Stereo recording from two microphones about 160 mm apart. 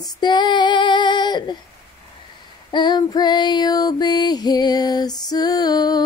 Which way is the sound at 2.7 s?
25° left (ahead or behind).